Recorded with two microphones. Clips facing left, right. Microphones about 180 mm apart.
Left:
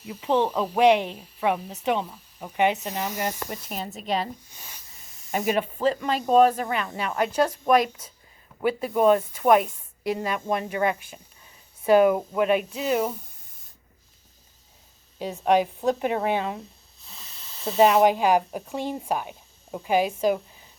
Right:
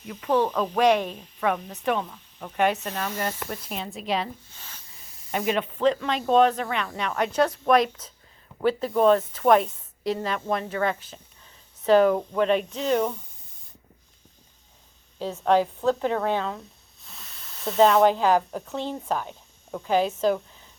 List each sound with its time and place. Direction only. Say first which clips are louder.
0.1 s speech: even; 10° left (ahead or behind)
3.7 s speech: even; 5° left (ahead or behind)
4.4 s a sound: even; 15° left (ahead or behind)
5.5 s speech: right 1 dB; 10° left (ahead or behind)
15.4 s speech: even; 15° left (ahead or behind)
17.0 s snake: even; centre (ahead or behind)
18.0 s speech: even; 15° left (ahead or behind)